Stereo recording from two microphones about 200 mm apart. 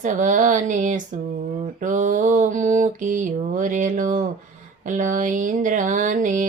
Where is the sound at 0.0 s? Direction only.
40° right (ahead or behind).